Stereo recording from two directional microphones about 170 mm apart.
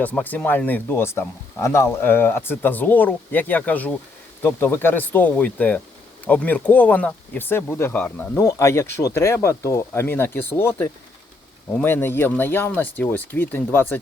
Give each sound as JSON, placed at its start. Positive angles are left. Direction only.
{"t": 0.0, "sound": "speech", "side_deg": 10}